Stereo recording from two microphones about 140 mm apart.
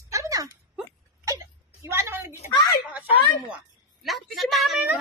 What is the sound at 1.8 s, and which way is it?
Speech, 20° right (ahead or behind).